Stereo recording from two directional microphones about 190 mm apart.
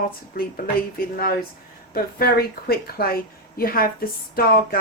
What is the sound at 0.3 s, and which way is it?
A woman's voice, 50° left (ahead or behind).